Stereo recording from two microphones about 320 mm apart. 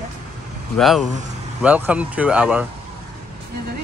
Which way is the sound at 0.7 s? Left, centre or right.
Centre.